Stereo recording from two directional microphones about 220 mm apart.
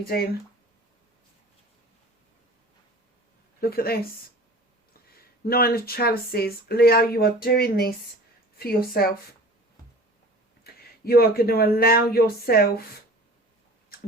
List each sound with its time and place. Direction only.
3.6 s speech: 45° left (ahead or behind)
5.5 s speech: 45° left (ahead or behind)
10.6 s speech: 45° left (ahead or behind)